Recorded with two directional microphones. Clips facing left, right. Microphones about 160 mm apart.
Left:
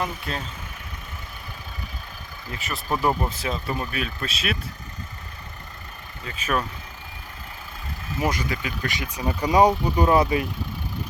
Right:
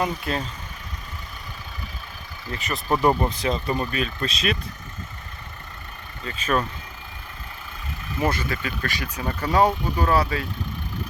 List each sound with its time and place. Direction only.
0.0 s speech: centre (ahead or behind)
2.5 s speech: centre (ahead or behind)
6.2 s speech: 10° left (ahead or behind)
8.2 s speech: 15° left (ahead or behind)